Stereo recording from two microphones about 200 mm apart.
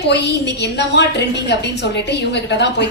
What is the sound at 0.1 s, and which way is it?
A woman's voice, 60° left (ahead or behind).